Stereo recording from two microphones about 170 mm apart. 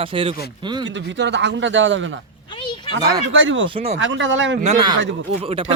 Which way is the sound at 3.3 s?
90° right.